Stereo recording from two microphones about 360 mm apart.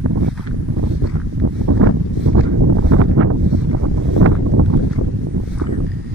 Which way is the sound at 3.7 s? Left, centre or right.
Right.